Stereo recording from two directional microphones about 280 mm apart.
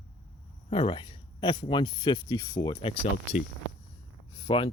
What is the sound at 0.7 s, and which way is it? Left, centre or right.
Speech, centre.